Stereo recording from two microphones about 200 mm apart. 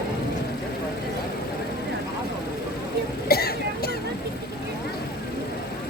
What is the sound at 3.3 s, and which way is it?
Throat clearing, 50° left (ahead or behind).